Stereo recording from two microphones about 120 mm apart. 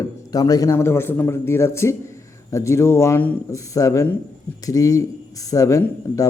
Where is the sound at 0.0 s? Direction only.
30° left (ahead or behind).